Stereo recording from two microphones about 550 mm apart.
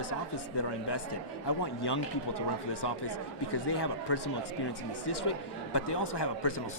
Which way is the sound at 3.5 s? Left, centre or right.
Left.